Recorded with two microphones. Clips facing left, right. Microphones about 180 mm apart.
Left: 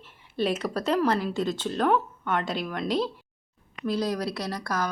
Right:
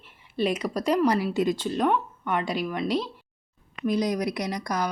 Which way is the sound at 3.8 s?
15° right (ahead or behind).